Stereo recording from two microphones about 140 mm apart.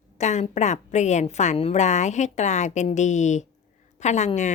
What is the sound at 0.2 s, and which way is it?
A woman's voice, 55° left (ahead or behind).